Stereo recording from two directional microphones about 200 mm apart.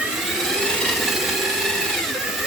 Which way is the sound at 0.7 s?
Centre (ahead or behind).